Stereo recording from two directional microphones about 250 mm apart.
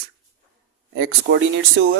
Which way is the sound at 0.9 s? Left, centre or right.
Right.